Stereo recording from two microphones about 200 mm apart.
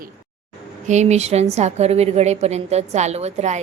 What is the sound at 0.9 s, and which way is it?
A woman's voice, 35° right (ahead or behind).